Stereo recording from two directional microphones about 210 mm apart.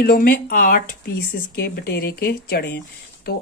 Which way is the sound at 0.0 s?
45° left (ahead or behind).